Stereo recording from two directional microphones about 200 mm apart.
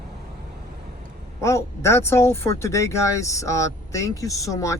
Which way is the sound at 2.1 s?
10° left (ahead or behind).